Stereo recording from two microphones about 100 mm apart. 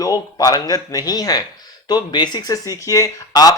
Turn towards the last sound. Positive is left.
turn(degrees=35)  # may be behind; listen again after turning